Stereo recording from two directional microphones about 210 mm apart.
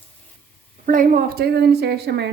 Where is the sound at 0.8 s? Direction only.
40° right (ahead or behind).